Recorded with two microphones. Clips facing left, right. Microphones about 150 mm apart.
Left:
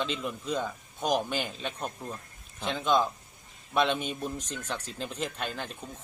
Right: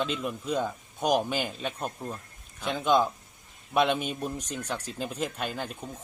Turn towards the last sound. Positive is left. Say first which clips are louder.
# right 2 dB
turn(degrees=-10)  # may be behind; listen again after turning